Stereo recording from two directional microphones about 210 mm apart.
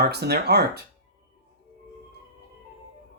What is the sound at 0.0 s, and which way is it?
Speech, 50° right (ahead or behind).